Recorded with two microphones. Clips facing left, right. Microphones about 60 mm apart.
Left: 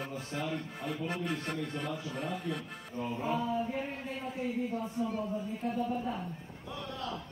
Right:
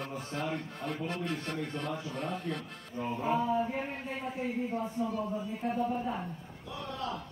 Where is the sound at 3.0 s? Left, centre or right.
Right.